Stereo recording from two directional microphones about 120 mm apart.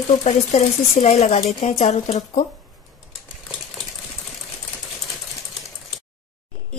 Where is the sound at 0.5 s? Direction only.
85° left.